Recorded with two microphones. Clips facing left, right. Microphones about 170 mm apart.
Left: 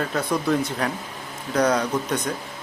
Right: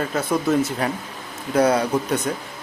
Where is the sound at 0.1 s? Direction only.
5° right (ahead or behind).